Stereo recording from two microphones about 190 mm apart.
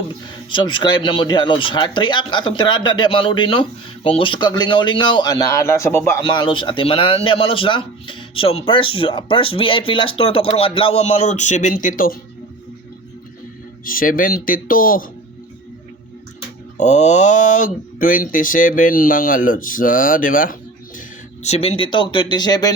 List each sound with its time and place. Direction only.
0.5 s speech: 25° left (ahead or behind)
6.2 s speech: 25° left (ahead or behind); by 12.1 s 45° left (ahead or behind)
13.8 s speech: 50° left (ahead or behind)
16.7 s speech: 40° left (ahead or behind)
21.4 s speech: 35° left (ahead or behind)